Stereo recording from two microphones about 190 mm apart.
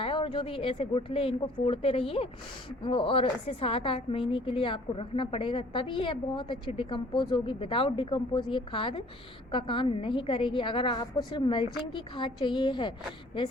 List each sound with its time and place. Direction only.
0.0 s a woman's voice: 30° left (ahead or behind)